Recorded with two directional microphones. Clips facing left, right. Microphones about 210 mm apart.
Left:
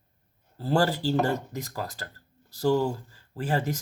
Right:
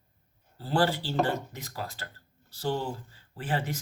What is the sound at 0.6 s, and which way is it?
Speech, 40° left (ahead or behind).